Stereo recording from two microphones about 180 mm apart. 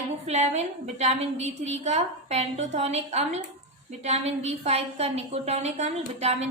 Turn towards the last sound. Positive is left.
turn(degrees=-35)  # may be behind; listen again after turning